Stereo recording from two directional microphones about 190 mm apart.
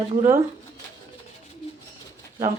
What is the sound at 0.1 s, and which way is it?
Speech, 40° right (ahead or behind).